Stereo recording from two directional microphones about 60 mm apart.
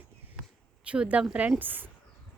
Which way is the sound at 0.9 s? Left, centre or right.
Right.